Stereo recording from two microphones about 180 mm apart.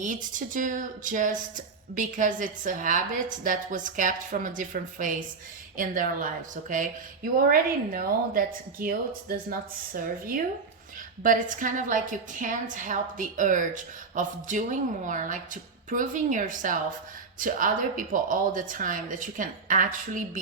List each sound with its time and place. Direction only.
0.0 s speech: 45° right (ahead or behind)